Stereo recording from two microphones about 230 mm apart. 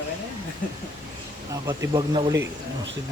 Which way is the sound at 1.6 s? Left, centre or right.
Centre.